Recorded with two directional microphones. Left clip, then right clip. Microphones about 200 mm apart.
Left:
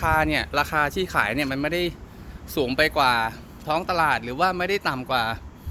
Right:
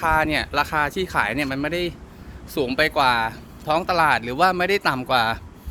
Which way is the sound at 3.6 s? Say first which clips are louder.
Right 3 dB; 10° right (ahead or behind).